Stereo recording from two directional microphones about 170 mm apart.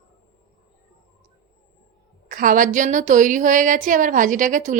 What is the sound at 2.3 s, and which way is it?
Speech, 50° right (ahead or behind).